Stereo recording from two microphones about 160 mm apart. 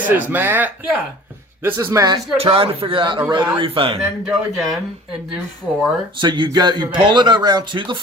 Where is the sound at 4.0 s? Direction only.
Centre (ahead or behind).